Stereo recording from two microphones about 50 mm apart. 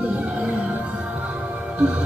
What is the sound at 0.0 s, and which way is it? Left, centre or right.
Music, right.